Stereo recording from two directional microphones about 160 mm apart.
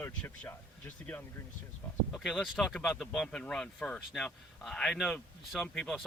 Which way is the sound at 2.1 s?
5° left (ahead or behind).